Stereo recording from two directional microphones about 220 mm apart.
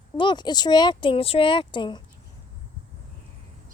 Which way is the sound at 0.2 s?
20° left (ahead or behind).